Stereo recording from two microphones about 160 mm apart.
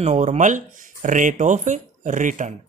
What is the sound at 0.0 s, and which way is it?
Speech, 45° right (ahead or behind).